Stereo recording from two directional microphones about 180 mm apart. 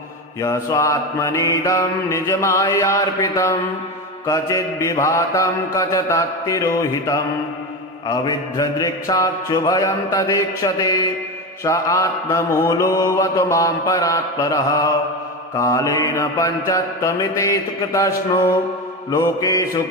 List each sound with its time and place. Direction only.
0.4 s mantra: 20° left (ahead or behind)
8.0 s mantra: 20° left (ahead or behind)